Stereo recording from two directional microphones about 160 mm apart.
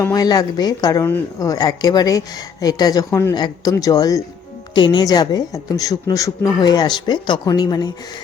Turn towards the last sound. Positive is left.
turn(degrees=25)  # may be behind; listen again after turning